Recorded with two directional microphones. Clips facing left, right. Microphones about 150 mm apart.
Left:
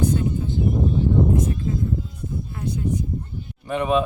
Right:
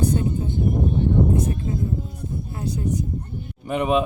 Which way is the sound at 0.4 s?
55° right (ahead or behind).